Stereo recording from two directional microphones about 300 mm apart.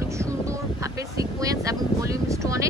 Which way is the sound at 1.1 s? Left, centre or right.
Centre.